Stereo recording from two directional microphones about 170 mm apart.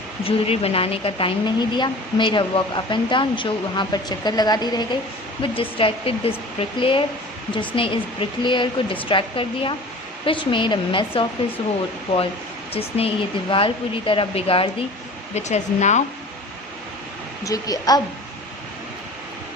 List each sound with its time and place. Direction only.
0.3 s speech: 35° left (ahead or behind)
12.7 s speech: 35° left (ahead or behind)
17.4 s speech: 20° left (ahead or behind)